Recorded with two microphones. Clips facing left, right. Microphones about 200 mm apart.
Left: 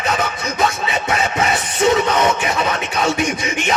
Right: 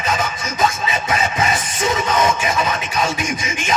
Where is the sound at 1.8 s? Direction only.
65° left (ahead or behind).